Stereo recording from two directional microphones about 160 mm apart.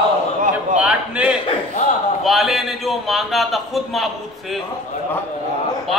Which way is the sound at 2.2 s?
Centre (ahead or behind).